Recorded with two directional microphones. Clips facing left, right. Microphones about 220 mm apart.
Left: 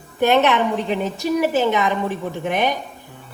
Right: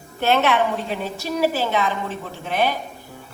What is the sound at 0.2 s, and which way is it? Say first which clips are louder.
A woman's voice: left 3 dB; 15° left (ahead or behind).